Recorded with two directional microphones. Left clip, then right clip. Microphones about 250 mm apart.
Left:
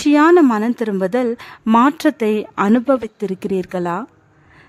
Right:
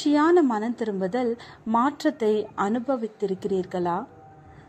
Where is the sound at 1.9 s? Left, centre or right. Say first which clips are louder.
Left 6 dB; left.